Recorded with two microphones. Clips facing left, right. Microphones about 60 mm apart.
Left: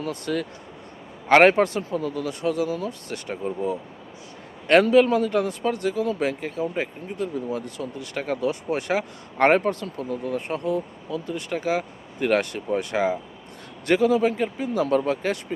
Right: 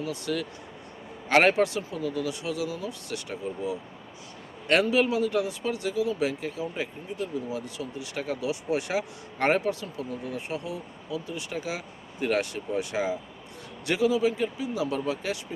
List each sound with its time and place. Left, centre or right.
0.0 s speech: left